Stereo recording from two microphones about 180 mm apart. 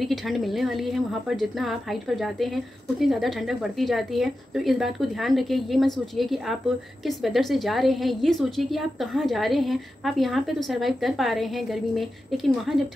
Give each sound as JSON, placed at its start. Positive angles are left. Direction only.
{"t": 0.0, "sound": "a woman's voice", "side_deg": 0}